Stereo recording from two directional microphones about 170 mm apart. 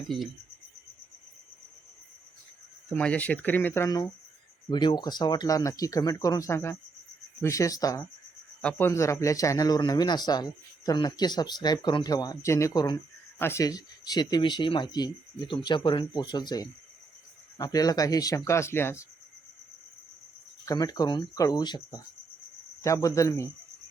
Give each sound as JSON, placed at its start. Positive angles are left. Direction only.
{"t": 2.9, "sound": "a man's voice", "side_deg": 10}
{"t": 20.7, "sound": "a man's voice", "side_deg": 20}